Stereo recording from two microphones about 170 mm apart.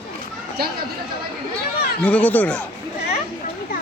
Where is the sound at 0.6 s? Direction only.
65° right (ahead or behind).